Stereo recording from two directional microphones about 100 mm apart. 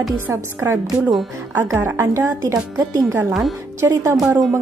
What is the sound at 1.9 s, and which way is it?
A woman's voice, 25° right (ahead or behind).